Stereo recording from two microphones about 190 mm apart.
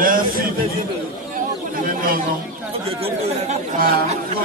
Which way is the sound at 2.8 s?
30° right (ahead or behind).